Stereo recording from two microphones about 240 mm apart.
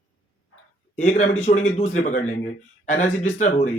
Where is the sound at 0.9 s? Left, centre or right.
Left.